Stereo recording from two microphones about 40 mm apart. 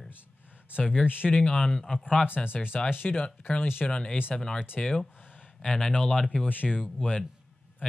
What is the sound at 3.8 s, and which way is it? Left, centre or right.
Speech, left.